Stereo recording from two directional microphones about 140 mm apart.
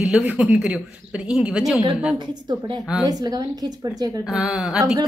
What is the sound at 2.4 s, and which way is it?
A woman's voice, 30° right (ahead or behind).